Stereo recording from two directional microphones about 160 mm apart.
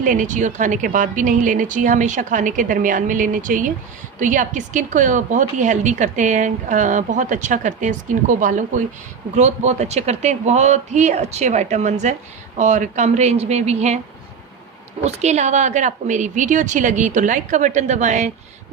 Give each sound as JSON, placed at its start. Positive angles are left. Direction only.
{"t": 0.0, "sound": "a woman's voice", "side_deg": -55}
{"t": 15.0, "sound": "a woman's voice", "side_deg": -45}